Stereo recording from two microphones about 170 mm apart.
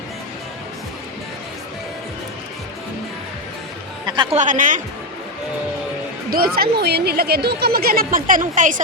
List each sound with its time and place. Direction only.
4.0 s speech: 30° right (ahead or behind)
4.4 s speech: 50° right (ahead or behind)
6.3 s speech: 60° right (ahead or behind)